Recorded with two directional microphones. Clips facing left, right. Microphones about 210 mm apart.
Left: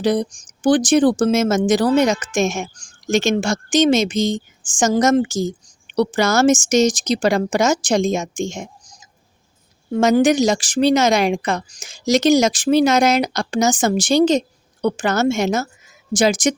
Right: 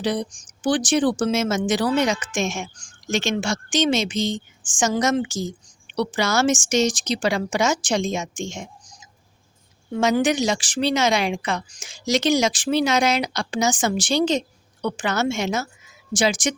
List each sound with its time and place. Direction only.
0.0 s speech: 45° left (ahead or behind)